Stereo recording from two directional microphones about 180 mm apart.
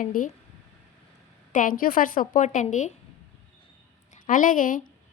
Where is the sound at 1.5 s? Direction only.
50° left (ahead or behind).